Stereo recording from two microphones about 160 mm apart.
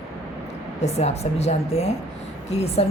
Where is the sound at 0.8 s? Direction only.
40° left (ahead or behind).